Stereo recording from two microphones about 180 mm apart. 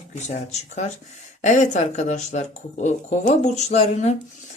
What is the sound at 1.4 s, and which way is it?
Speech, 40° left (ahead or behind).